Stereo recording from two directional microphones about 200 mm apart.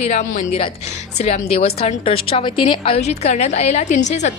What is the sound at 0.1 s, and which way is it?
A woman's voice, 35° left (ahead or behind).